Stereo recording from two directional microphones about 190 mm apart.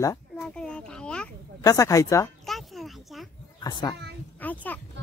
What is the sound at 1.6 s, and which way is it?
Speech, 15° left (ahead or behind).